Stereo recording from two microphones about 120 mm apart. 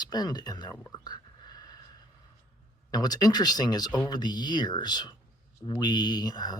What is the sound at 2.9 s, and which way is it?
Speech, 35° left (ahead or behind).